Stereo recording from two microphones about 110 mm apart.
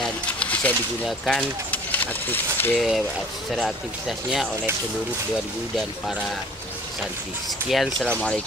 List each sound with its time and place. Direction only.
0.0 s a sound: 10° left (ahead or behind)
1.0 s speech: centre (ahead or behind)
1.7 s speech: 15° left (ahead or behind)
2.7 s speech: 5° right (ahead or behind)
7.7 s speech: centre (ahead or behind)